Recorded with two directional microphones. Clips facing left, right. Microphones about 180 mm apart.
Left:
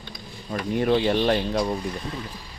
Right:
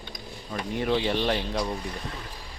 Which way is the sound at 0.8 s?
50° left (ahead or behind).